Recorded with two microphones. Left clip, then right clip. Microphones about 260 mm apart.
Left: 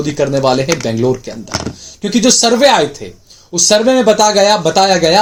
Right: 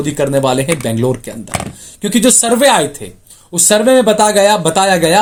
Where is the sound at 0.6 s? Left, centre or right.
Right.